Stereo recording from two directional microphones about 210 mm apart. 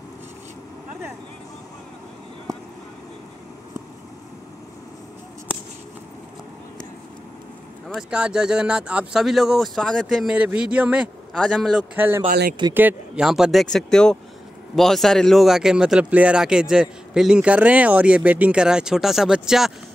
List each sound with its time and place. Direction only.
7.9 s speech: 5° right (ahead or behind)
12.3 s speech: 40° right (ahead or behind)
12.7 s speech: 5° right (ahead or behind)